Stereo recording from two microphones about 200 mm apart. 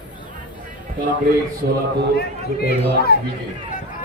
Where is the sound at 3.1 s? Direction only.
50° left (ahead or behind).